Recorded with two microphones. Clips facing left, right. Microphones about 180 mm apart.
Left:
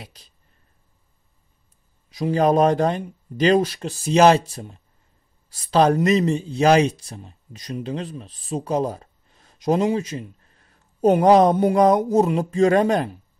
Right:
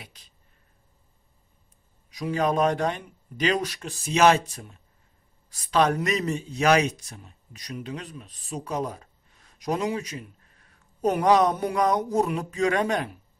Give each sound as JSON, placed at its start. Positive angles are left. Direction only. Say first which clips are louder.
{"t": 0.0, "sound": "speech", "louder": "left 6 dB", "side_deg": 35}
{"t": 2.0, "sound": "speech", "louder": "left 6 dB", "side_deg": 30}